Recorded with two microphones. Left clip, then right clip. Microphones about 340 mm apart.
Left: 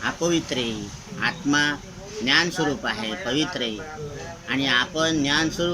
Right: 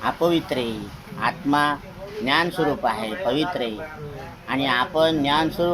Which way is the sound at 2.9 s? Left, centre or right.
Centre.